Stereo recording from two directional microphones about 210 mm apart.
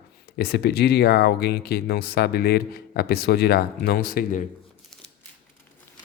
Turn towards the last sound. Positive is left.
turn(degrees=45)  # may be behind; listen again after turning